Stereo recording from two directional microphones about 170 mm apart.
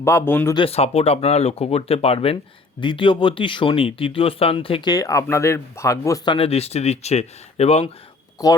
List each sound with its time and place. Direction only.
0.0 s speech: 15° left (ahead or behind)
0.5 s speech: 35° left (ahead or behind); by 6.3 s 20° left (ahead or behind)
6.3 s speech: 35° left (ahead or behind)
8.4 s speech: 20° left (ahead or behind)